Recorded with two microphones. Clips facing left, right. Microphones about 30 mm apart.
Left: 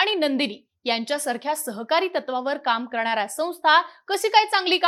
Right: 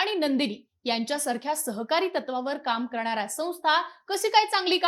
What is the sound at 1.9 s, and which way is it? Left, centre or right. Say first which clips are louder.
A woman's voice: left 4 dB; centre.